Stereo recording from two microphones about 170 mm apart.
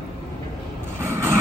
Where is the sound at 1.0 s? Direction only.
15° right (ahead or behind).